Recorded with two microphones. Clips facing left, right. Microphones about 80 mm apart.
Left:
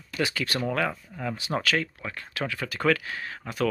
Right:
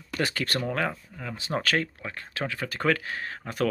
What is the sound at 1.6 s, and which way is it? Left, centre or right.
Speech, right.